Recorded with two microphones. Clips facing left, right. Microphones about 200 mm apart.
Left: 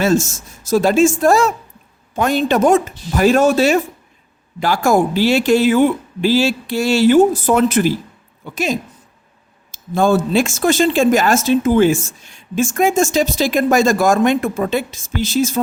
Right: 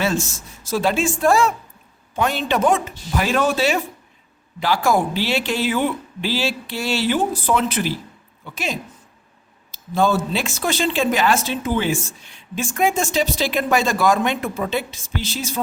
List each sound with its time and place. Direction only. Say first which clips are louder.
0.0 s speech: left 7 dB; 45° left (ahead or behind)